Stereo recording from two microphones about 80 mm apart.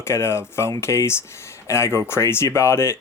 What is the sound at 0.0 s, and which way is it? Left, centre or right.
Speech, left.